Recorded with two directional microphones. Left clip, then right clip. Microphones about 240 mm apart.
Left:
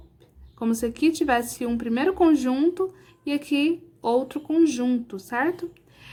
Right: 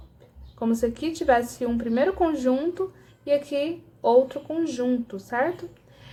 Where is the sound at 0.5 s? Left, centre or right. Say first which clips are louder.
Right 1 dB; left.